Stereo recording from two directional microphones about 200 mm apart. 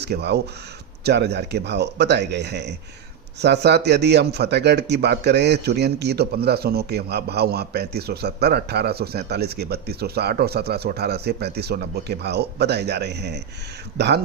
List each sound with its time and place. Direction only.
0.0 s a man's voice: 55° right (ahead or behind)